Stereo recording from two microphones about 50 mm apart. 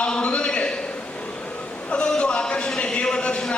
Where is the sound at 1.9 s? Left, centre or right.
Centre.